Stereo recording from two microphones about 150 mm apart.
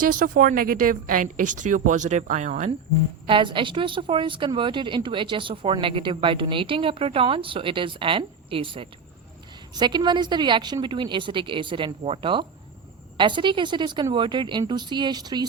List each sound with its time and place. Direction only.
0.0 s a woman's voice: 70° right (ahead or behind); by 2.7 s 50° right (ahead or behind)
3.2 s a woman's voice: 35° right (ahead or behind)